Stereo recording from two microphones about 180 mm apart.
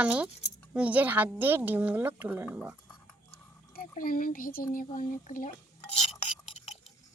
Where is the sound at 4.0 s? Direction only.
50° left (ahead or behind).